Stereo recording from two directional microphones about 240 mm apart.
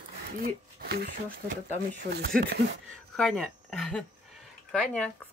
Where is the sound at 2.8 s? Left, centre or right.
Centre.